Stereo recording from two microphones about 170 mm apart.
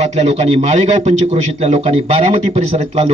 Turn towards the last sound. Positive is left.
turn(degrees=-40)  # may be behind; listen again after turning